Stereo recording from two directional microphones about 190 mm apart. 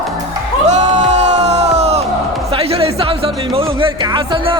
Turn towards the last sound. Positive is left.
turn(degrees=-25)  # may be behind; listen again after turning